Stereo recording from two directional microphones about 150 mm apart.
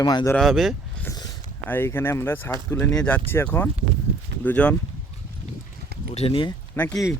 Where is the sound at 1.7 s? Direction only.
15° left (ahead or behind).